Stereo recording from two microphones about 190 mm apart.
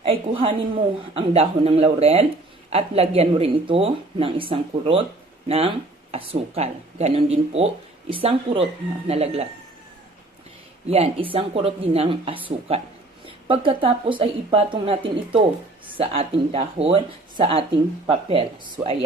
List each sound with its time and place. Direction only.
0.0 s speech: 30° right (ahead or behind)
10.8 s speech: 30° right (ahead or behind)